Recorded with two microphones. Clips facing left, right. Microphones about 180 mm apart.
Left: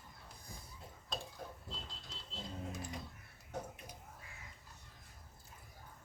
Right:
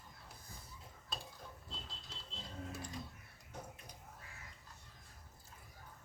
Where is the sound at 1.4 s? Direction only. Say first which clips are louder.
Left 5 dB; 60° left (ahead or behind).